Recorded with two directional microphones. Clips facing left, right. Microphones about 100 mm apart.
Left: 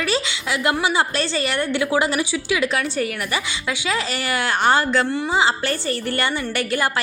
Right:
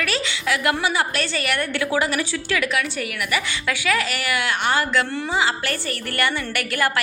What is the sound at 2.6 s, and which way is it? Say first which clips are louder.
A woman's voice: left 3 dB; 30° left (ahead or behind).